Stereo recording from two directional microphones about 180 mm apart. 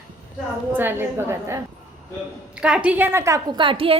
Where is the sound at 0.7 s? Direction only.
10° right (ahead or behind).